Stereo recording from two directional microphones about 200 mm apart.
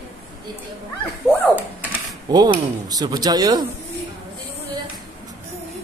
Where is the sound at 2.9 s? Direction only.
20° right (ahead or behind).